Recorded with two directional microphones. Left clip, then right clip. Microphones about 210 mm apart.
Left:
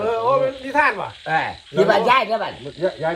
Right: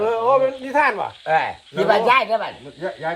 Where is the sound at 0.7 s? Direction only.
55° right (ahead or behind).